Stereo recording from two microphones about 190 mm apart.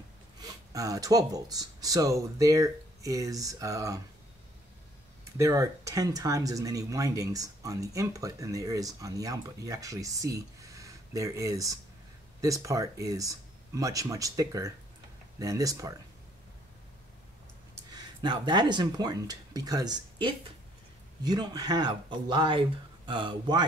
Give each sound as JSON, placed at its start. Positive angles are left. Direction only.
{"t": 0.4, "sound": "speech", "side_deg": -20}
{"t": 5.2, "sound": "speech", "side_deg": -15}
{"t": 17.9, "sound": "speech", "side_deg": -20}